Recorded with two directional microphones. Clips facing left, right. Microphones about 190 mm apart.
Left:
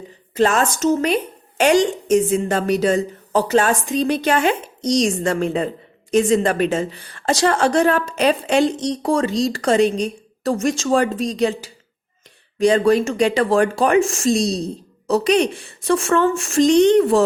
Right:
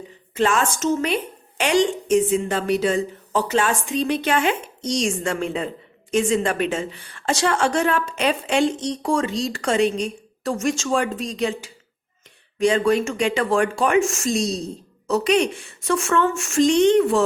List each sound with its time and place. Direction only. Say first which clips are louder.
0.3 s a woman's voice: left 3 dB; 40° left (ahead or behind)